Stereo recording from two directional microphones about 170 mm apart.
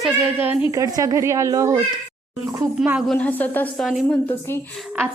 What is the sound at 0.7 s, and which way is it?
A woman's voice, 20° right (ahead or behind).